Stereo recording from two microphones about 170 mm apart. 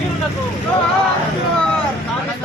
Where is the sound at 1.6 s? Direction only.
5° left (ahead or behind).